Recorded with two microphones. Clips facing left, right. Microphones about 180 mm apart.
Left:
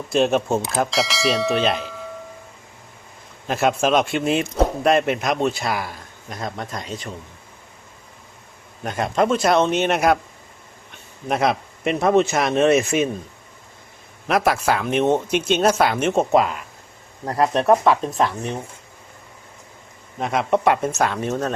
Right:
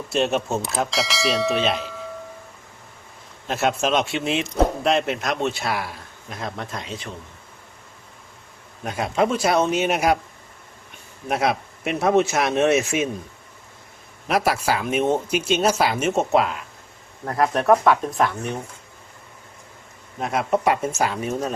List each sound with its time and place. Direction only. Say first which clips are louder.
0.1 s speech: left 4 dB; centre (ahead or behind)
3.4 s speech: left 3 dB; centre (ahead or behind)
8.8 s speech: left 1 dB; 5° right (ahead or behind)
11.3 s speech: left 2 dB; 5° right (ahead or behind)
14.3 s speech: left 2 dB; centre (ahead or behind)
17.2 s speech: left 1 dB; 20° left (ahead or behind)
20.1 s speech: left 2 dB; centre (ahead or behind)